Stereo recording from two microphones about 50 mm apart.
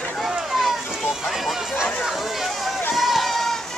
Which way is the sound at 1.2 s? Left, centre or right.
Centre.